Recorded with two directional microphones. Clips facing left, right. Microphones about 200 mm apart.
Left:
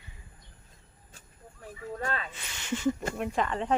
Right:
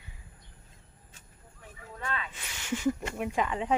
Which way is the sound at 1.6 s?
40° left (ahead or behind).